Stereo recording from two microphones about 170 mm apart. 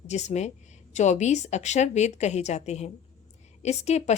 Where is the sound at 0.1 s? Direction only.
40° left (ahead or behind).